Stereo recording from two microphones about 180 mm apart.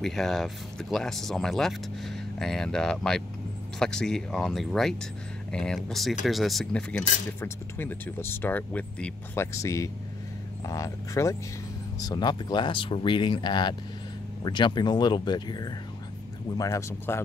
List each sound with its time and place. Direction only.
0.0 s speech: centre (ahead or behind)